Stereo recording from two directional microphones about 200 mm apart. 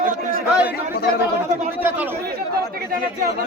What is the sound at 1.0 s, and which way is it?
Speech, 55° left (ahead or behind).